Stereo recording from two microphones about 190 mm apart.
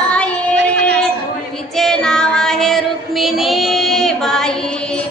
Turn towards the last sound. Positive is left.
turn(degrees=0)  # may be behind; listen again after turning